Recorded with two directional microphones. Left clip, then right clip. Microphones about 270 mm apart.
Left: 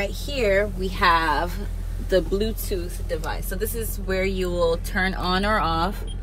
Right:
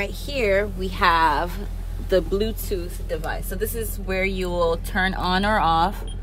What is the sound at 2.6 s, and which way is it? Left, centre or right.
Speech, centre.